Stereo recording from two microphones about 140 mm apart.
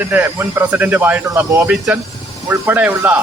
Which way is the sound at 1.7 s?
Centre (ahead or behind).